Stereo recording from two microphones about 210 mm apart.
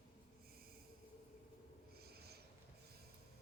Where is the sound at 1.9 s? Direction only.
50° right (ahead or behind).